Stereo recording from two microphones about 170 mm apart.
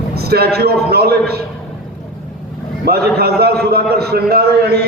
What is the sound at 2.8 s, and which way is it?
A man's voice, 65° right (ahead or behind).